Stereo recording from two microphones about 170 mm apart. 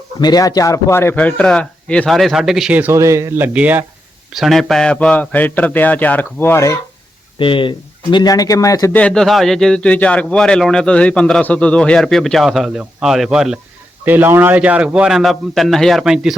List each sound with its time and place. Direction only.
0.2 s a man's voice: 25° left (ahead or behind)
7.3 s speech: 30° left (ahead or behind)
9.0 s a man's voice: 5° left (ahead or behind)